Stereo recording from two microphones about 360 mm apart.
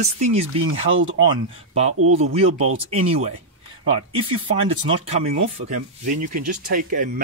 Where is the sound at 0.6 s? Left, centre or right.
Right.